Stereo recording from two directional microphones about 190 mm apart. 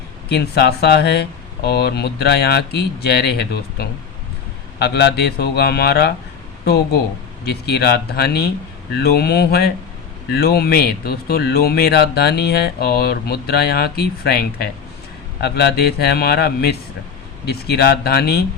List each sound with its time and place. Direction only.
0.3 s speech: 55° left (ahead or behind)